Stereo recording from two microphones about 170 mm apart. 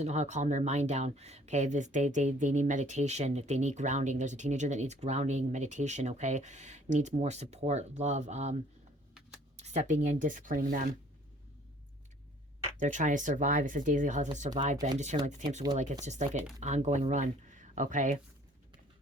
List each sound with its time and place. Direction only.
0.0 s speech: 40° right (ahead or behind)
9.6 s speech: 40° right (ahead or behind)
12.8 s speech: 45° right (ahead or behind)
16.0 s speech: 45° right (ahead or behind)